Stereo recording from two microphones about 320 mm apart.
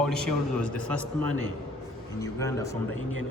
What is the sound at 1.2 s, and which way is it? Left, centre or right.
Speech, right.